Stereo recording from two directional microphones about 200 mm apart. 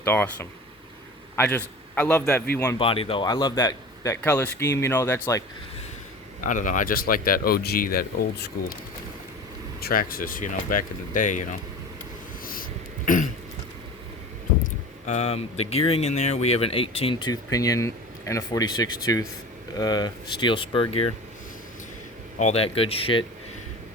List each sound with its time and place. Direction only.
0.0 s a man's voice: 10° left (ahead or behind)
2.7 s speech: 25° left (ahead or behind)
6.4 s speech: 40° left (ahead or behind)
9.8 s speech: 45° left (ahead or behind)
14.6 s speech: 35° left (ahead or behind)
22.4 s speech: 30° left (ahead or behind)